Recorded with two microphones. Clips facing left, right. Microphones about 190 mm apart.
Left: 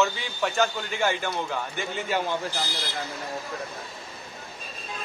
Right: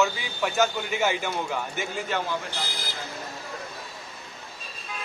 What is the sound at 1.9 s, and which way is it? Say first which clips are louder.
Speech: left 2 dB; centre (ahead or behind).